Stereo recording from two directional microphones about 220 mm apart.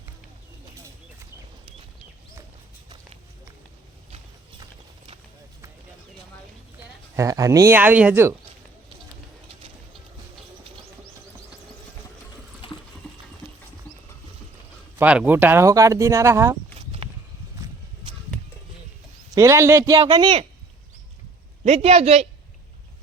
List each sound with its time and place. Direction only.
7.2 s speech: 15° right (ahead or behind)
12.6 s water: 25° left (ahead or behind)
14.9 s speech: 5° right (ahead or behind)
17.0 s a sound: 25° right (ahead or behind)
19.3 s a man's voice: 15° right (ahead or behind)
21.6 s a man's voice: 25° right (ahead or behind)